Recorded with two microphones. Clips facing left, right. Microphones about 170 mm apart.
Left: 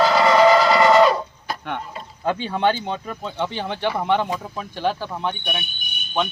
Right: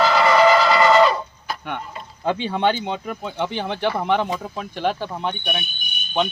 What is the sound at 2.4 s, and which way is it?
Speech, 20° right (ahead or behind).